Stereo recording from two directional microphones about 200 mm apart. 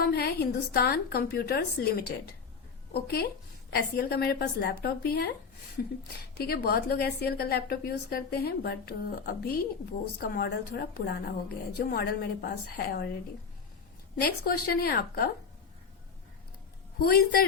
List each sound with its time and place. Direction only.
0.0 s a woman's voice: 50° left (ahead or behind)
6.3 s a woman's voice: 50° left (ahead or behind)
14.2 s a woman's voice: 50° left (ahead or behind)
17.1 s a woman's voice: 50° left (ahead or behind)